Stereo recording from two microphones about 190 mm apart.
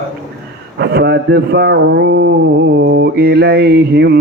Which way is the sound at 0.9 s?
60° right (ahead or behind).